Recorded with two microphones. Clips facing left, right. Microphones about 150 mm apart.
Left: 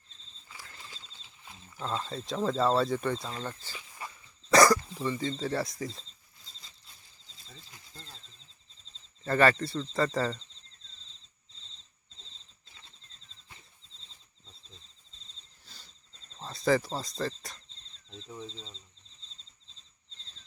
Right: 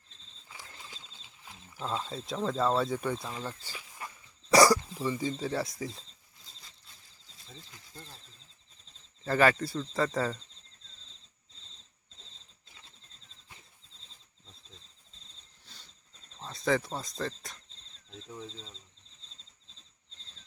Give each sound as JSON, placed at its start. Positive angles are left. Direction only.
{"t": 0.4, "sound": "bird", "side_deg": -15}
{"t": 1.7, "sound": "speech", "side_deg": -10}
{"t": 4.5, "sound": "dog", "side_deg": -15}
{"t": 4.9, "sound": "speech", "side_deg": -5}
{"t": 9.2, "sound": "speech", "side_deg": -5}
{"t": 16.4, "sound": "cricket", "side_deg": 0}
{"t": 18.1, "sound": "speech", "side_deg": 0}